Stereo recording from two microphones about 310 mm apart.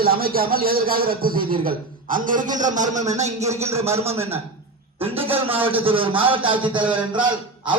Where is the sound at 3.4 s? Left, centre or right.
Centre.